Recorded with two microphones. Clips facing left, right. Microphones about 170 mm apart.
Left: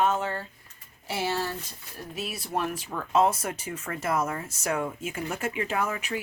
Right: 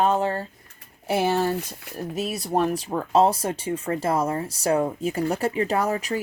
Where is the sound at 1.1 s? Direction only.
55° right (ahead or behind).